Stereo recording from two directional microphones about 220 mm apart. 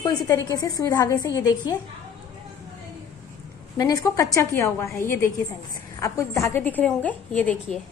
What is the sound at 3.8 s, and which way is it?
A woman's voice, 15° left (ahead or behind).